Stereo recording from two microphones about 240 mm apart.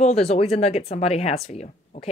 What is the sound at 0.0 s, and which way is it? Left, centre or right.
Speech, left.